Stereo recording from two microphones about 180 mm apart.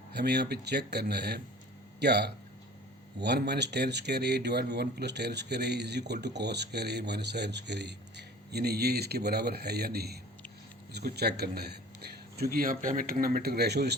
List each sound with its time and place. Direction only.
0.1 s a man's voice: 65° right (ahead or behind)